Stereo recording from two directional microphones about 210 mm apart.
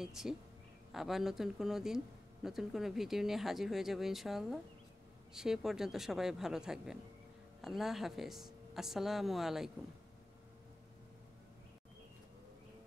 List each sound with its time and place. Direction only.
0.0 s speech: centre (ahead or behind)